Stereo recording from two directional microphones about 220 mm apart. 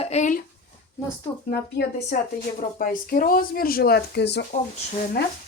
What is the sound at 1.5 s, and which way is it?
Speech, 45° left (ahead or behind).